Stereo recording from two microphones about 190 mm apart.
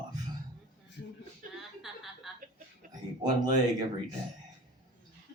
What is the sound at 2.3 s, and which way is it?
Chuckle, centre (ahead or behind).